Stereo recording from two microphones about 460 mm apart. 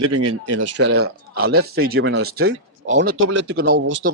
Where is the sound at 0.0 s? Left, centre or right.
Right.